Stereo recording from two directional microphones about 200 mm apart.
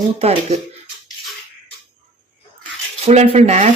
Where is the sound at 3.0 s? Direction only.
30° right (ahead or behind).